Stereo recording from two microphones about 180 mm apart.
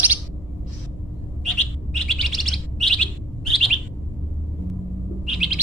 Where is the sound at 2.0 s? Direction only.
Centre (ahead or behind).